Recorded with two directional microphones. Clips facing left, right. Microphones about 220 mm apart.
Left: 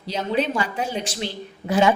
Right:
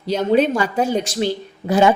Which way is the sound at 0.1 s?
50° right (ahead or behind).